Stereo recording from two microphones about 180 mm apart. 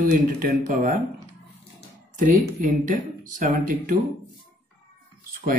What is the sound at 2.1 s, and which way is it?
Speech, 45° right (ahead or behind).